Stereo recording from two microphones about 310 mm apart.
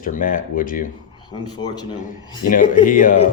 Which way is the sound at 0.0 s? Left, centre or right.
Left.